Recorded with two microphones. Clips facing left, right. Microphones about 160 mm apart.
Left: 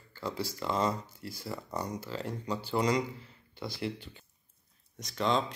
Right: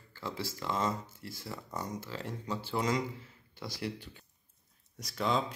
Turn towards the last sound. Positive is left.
turn(degrees=-5)  # may be behind; listen again after turning